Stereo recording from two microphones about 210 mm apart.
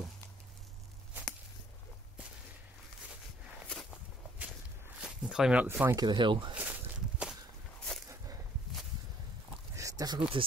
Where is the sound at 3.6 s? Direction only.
Centre (ahead or behind).